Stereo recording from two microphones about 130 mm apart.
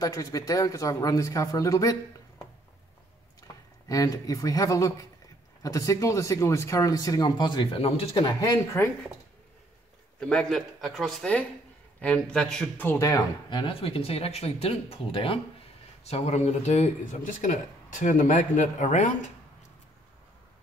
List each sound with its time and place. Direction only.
0.0 s speech: 25° left (ahead or behind)
3.9 s speech: 25° left (ahead or behind); by 8.3 s 50° left (ahead or behind)
8.3 s speech: 30° left (ahead or behind)
8.8 s speech: 20° left (ahead or behind)
10.2 s a man's voice: 5° left (ahead or behind)
13.5 s speech: 40° left (ahead or behind); by 19.3 s 70° left (ahead or behind)